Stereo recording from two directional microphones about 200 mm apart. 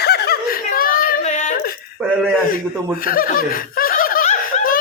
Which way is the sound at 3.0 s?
45° left (ahead or behind).